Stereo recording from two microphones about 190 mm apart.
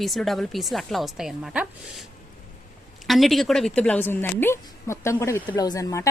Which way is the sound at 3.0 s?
Centre (ahead or behind).